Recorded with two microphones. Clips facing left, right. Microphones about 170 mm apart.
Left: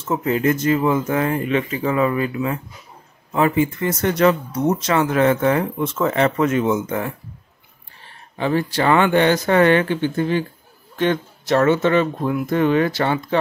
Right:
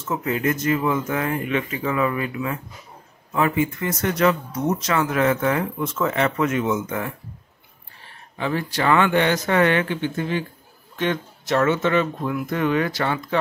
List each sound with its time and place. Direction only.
0.1 s speech: 30° left (ahead or behind)
8.4 s speech: 30° left (ahead or behind)